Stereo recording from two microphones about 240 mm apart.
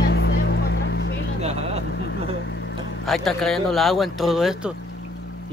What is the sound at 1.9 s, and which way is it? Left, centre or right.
Vehicle, left.